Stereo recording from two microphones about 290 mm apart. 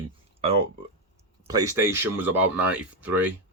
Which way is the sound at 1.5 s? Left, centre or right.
Centre.